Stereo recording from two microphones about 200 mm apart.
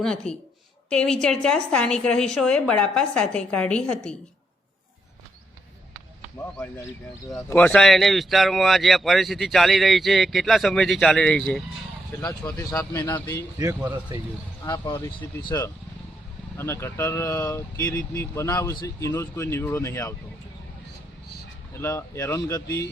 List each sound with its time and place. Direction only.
0.0 s speech: 5° left (ahead or behind)
7.3 s speech: 10° left (ahead or behind)
12.5 s speech: 15° left (ahead or behind)
13.6 s a man's voice: 15° right (ahead or behind)
14.6 s speech: 20° left (ahead or behind)
21.8 s speech: 15° left (ahead or behind)